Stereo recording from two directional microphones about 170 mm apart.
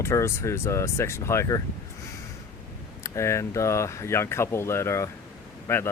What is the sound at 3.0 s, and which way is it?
Speech, 15° left (ahead or behind).